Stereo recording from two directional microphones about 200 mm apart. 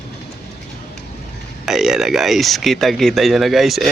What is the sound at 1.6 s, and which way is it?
Speech, centre (ahead or behind).